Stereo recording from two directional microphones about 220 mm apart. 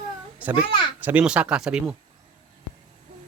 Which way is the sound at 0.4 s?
5° right (ahead or behind).